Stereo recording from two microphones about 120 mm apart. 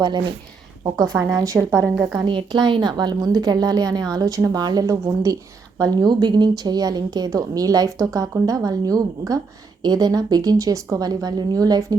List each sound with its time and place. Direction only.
0.9 s a woman's voice: 30° right (ahead or behind)